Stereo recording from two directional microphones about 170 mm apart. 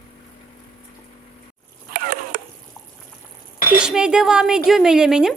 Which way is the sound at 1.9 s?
55° right (ahead or behind).